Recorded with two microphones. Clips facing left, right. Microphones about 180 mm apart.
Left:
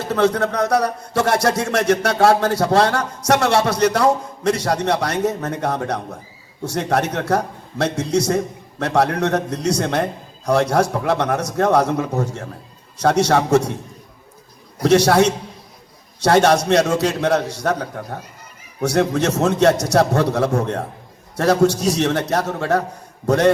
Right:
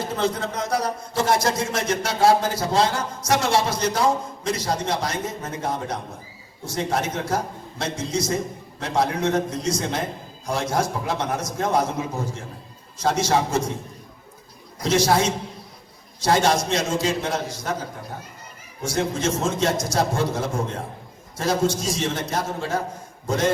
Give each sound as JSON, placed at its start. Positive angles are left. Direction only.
{"t": 0.1, "sound": "a man's voice", "side_deg": 70}
{"t": 14.8, "sound": "a man's voice", "side_deg": 70}